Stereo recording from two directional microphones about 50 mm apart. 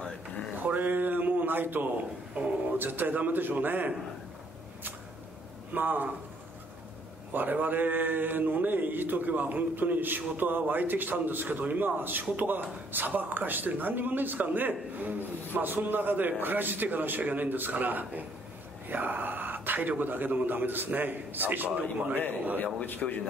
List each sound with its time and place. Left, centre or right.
0.6 s a sound: right
2.4 s speech: right
2.8 s a man's voice: right
5.7 s a man's voice: right
7.3 s a man's voice: right
22.6 s speech: left